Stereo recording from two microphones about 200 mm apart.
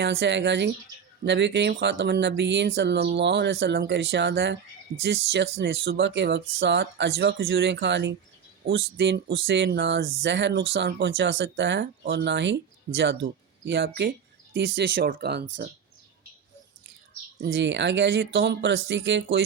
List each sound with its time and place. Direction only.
0.0 s speech: 60° right (ahead or behind)
12.9 s speech: 45° right (ahead or behind)
13.7 s speech: 55° right (ahead or behind)
17.4 s speech: 60° right (ahead or behind)